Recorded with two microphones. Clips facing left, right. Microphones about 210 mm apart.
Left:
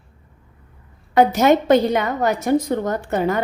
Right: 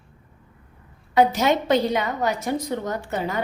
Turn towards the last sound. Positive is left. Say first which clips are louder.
# left 6 dB
turn(degrees=55)  # may be behind; listen again after turning